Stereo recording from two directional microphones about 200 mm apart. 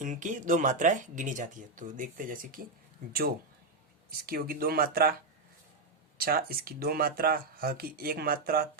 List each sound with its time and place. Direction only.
0.0 s speech: 40° right (ahead or behind)
4.3 s speech: 45° right (ahead or behind)
6.1 s speech: 50° right (ahead or behind)